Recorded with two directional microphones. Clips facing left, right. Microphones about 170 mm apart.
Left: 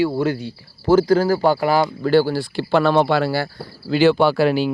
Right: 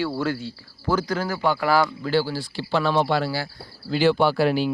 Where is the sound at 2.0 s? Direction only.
50° left (ahead or behind).